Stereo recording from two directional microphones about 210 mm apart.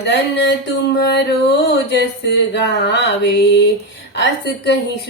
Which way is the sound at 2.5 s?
55° left (ahead or behind).